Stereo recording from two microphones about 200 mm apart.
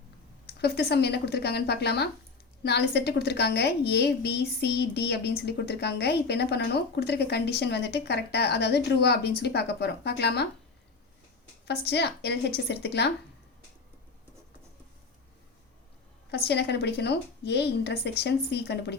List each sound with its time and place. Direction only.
0.4 s a woman's voice: 50° left (ahead or behind)
11.6 s a woman's voice: 55° left (ahead or behind)
16.5 s a woman's voice: 55° left (ahead or behind)